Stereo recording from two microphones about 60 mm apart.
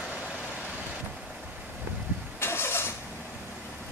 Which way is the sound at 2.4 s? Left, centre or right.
Left.